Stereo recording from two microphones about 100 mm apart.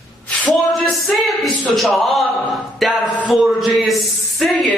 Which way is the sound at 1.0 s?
Centre (ahead or behind).